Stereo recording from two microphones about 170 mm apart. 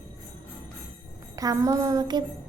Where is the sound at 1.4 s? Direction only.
20° right (ahead or behind).